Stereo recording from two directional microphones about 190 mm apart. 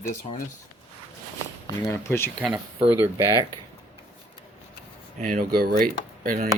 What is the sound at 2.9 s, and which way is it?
Speech, 10° right (ahead or behind).